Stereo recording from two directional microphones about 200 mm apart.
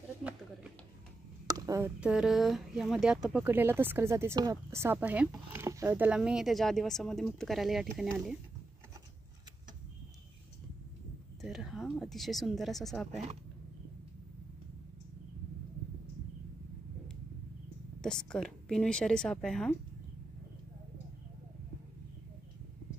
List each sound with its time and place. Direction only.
1.5 s a sound: 15° right (ahead or behind)
2.0 s speech: 5° right (ahead or behind)
11.4 s speech: centre (ahead or behind)
18.0 s speech: 5° left (ahead or behind)